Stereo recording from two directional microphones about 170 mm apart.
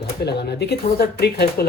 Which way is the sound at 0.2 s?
70° left (ahead or behind).